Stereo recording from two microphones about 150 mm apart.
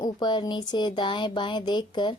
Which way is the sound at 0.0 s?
30° left (ahead or behind).